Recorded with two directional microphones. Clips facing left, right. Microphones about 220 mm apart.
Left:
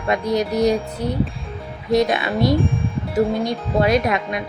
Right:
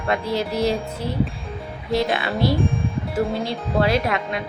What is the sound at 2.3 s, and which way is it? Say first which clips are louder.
Speech: left 3 dB; centre (ahead or behind).